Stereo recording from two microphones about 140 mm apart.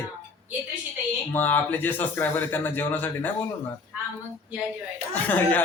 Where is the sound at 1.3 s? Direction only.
15° left (ahead or behind).